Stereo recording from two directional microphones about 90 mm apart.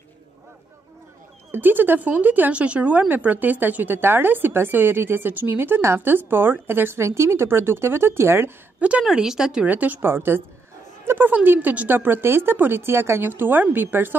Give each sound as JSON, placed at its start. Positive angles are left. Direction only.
{"t": 1.5, "sound": "speech", "side_deg": -20}
{"t": 9.0, "sound": "a woman's voice", "side_deg": -5}